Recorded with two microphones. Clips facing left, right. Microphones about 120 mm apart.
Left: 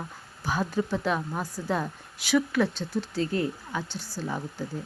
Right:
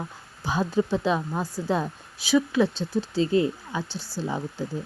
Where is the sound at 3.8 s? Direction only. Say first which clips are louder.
Right 2 dB; 15° left (ahead or behind).